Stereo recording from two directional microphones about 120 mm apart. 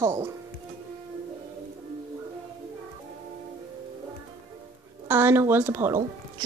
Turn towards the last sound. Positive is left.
turn(degrees=-20)  # may be behind; listen again after turning